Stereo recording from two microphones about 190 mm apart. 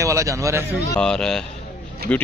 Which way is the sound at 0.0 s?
15° right (ahead or behind).